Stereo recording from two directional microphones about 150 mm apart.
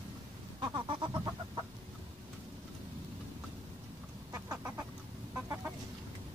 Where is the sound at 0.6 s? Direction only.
30° right (ahead or behind).